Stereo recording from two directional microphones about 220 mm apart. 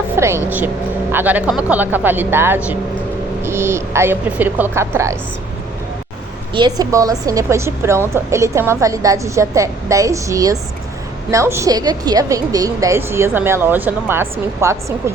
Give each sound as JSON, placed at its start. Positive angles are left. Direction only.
{"t": 0.2, "sound": "a woman's voice", "side_deg": -10}
{"t": 6.5, "sound": "a woman's voice", "side_deg": -20}